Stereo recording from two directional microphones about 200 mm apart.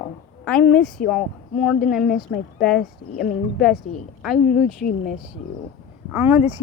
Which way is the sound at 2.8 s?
50° left (ahead or behind).